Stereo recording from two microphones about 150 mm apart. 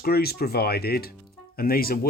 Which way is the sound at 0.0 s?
90° left.